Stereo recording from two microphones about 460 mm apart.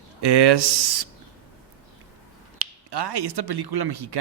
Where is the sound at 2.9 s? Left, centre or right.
Right.